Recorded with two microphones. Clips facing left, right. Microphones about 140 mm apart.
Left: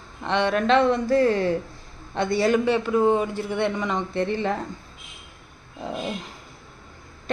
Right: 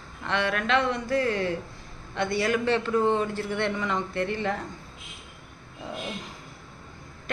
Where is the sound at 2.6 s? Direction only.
10° left (ahead or behind).